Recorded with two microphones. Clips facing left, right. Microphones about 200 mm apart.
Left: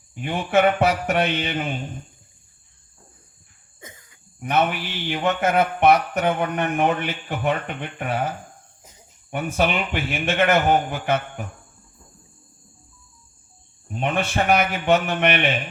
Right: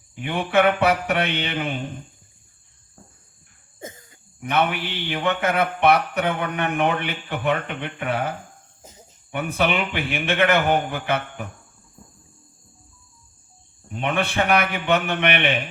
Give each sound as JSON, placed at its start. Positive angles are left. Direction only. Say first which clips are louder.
{"t": 0.3, "sound": "speech", "louder": "even", "side_deg": -60}
{"t": 4.5, "sound": "speech", "louder": "left 1 dB", "side_deg": -60}
{"t": 14.0, "sound": "speech", "louder": "even", "side_deg": -60}